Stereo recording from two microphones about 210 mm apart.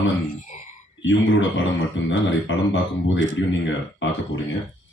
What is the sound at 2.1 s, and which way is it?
Speech, 60° left (ahead or behind).